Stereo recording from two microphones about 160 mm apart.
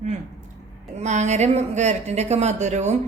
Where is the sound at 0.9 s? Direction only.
45° right (ahead or behind).